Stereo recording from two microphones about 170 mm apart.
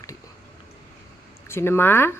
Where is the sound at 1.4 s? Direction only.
15° left (ahead or behind).